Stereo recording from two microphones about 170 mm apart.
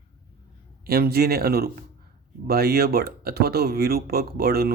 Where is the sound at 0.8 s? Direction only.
65° right (ahead or behind).